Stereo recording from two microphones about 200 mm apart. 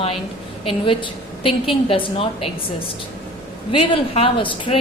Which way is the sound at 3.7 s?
30° left (ahead or behind).